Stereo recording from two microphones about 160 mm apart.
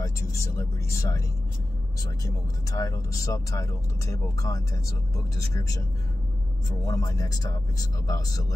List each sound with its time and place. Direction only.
0.0 s speech: 20° left (ahead or behind)
2.7 s speech: 20° left (ahead or behind)